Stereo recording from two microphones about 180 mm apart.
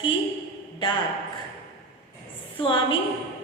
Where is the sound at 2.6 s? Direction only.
30° left (ahead or behind).